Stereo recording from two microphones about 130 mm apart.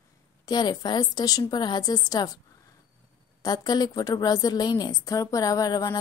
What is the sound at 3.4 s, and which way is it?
A woman's voice, 30° left (ahead or behind).